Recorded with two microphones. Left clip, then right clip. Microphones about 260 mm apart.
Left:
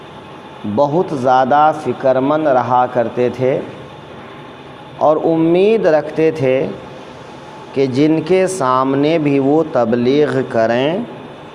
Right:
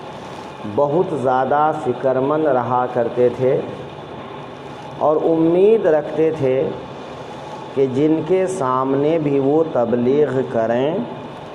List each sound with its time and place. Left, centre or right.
0.8 s speech: left
5.0 s a man's voice: left
5.5 s speech: left
7.8 s speech: left